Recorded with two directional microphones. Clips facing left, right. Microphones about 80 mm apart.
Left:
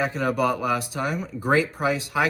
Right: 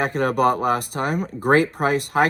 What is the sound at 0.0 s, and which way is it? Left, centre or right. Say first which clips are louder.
Speech: right 4 dB; right.